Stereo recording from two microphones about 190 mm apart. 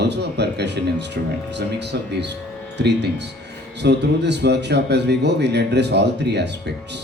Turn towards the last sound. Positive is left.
turn(degrees=-65)  # may be behind; listen again after turning